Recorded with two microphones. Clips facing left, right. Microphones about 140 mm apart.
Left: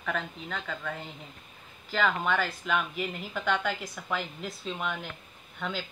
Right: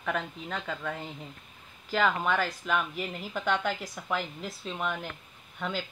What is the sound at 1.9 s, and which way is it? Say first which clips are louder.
Speech: right 1 dB; 5° right (ahead or behind).